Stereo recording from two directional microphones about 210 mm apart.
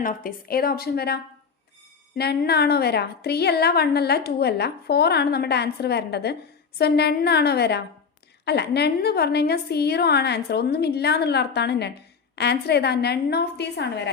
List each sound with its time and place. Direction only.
0.0 s a woman's voice: 40° left (ahead or behind)